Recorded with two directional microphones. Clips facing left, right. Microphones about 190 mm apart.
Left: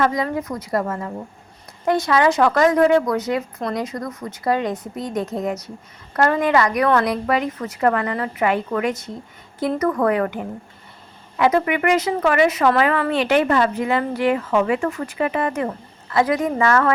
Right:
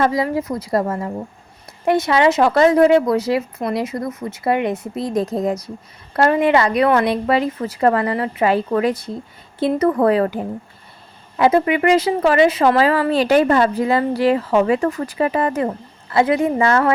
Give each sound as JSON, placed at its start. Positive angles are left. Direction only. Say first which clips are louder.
{"t": 0.0, "sound": "speech", "louder": "right 2 dB", "side_deg": -30}
{"t": 6.1, "sound": "speech", "louder": "right 3 dB", "side_deg": -25}